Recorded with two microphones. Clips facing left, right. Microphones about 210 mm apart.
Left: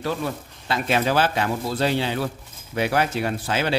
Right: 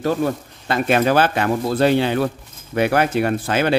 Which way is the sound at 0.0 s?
50° right (ahead or behind).